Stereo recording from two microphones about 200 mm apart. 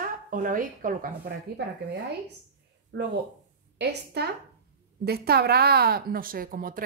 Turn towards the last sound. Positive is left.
turn(degrees=-45)  # may be behind; listen again after turning